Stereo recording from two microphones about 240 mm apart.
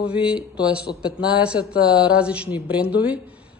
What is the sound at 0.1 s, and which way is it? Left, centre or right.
Speech, centre.